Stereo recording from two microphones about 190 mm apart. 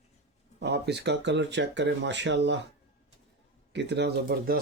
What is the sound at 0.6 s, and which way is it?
Speech, 60° right (ahead or behind).